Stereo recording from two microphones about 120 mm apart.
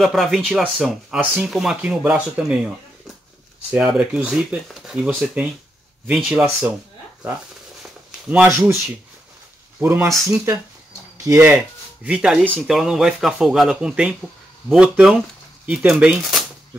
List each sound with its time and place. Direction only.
0.0 s speech: centre (ahead or behind)
3.7 s speech: 10° right (ahead or behind)
8.3 s speech: 15° right (ahead or behind)
9.8 s speech: 20° right (ahead or behind)
12.1 s speech: 5° right (ahead or behind)